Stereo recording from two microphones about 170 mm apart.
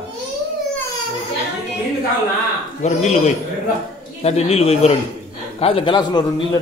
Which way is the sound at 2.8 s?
40° left (ahead or behind).